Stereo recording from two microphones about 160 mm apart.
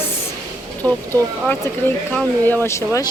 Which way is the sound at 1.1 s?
10° left (ahead or behind).